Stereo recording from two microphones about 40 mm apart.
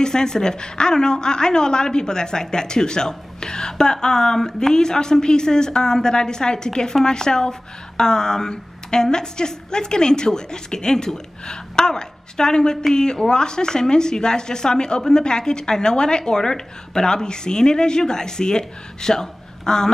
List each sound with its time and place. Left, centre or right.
0.0 s a woman's voice: centre